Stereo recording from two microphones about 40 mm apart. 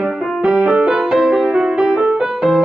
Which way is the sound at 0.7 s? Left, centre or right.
Centre.